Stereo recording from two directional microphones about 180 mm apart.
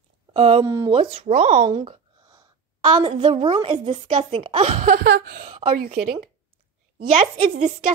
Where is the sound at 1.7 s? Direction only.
25° right (ahead or behind).